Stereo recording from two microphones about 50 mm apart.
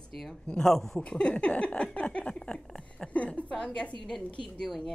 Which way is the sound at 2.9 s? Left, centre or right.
Left.